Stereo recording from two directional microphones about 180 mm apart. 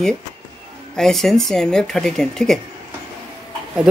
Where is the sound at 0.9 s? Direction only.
Centre (ahead or behind).